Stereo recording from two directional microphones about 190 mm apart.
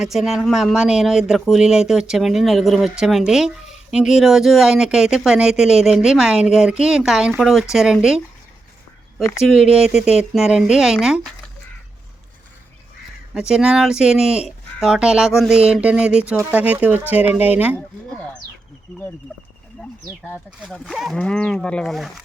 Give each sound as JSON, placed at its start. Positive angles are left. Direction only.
{"t": 0.0, "sound": "speech", "side_deg": 0}
{"t": 9.4, "sound": "speech", "side_deg": 0}
{"t": 13.3, "sound": "speech", "side_deg": -5}
{"t": 20.1, "sound": "speech", "side_deg": -5}